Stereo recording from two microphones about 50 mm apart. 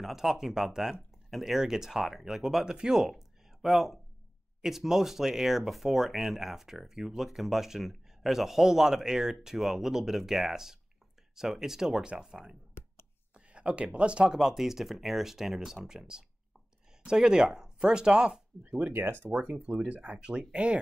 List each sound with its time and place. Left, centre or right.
0.0 s speech: centre
18.8 s speech: right
19.3 s speech: right